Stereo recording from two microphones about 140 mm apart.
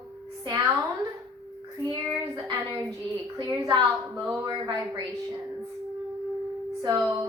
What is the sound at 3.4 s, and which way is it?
A woman's voice, 30° right (ahead or behind).